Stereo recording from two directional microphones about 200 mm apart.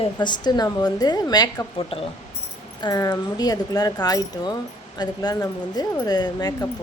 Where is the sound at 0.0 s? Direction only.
20° left (ahead or behind).